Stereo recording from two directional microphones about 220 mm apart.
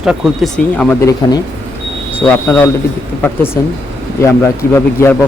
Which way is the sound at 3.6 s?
15° left (ahead or behind).